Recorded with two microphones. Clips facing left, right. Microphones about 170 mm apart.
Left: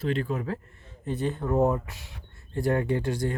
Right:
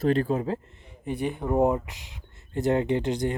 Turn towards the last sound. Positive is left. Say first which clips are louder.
# right 2 dB
turn(degrees=-20)  # may be behind; listen again after turning